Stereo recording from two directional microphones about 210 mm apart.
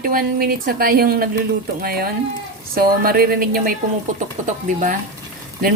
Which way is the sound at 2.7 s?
45° right (ahead or behind).